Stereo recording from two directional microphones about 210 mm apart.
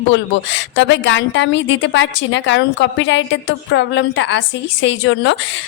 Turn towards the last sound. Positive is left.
turn(degrees=60)  # may be behind; listen again after turning